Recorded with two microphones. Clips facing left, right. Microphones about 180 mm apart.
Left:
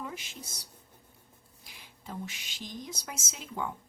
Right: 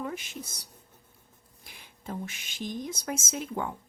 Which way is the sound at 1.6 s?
50° right (ahead or behind).